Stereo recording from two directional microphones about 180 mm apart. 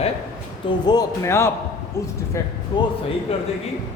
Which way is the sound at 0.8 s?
20° left (ahead or behind).